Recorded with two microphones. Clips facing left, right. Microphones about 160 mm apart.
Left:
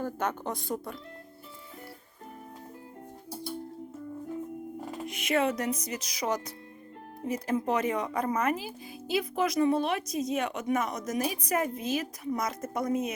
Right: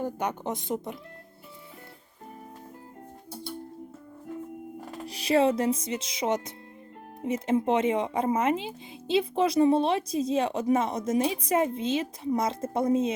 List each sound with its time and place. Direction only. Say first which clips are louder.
0.0 s speech: right 1 dB; 15° right (ahead or behind)
5.0 s speech: right 5 dB; 35° right (ahead or behind)